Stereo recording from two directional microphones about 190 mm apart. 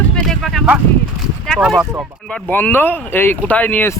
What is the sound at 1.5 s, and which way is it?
Speech, centre (ahead or behind).